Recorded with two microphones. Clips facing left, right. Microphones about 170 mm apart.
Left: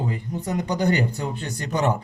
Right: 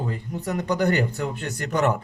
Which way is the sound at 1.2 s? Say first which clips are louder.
Right 1 dB; 30° left (ahead or behind).